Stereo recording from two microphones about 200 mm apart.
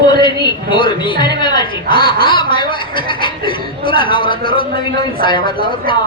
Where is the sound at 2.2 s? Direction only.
25° left (ahead or behind).